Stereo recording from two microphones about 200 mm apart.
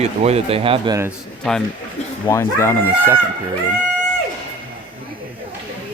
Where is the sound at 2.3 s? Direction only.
15° left (ahead or behind).